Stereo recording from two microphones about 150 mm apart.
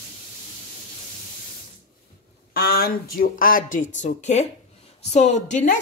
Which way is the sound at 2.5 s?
85° left.